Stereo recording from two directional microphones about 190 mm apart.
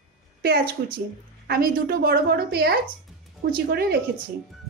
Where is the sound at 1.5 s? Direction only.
55° right (ahead or behind).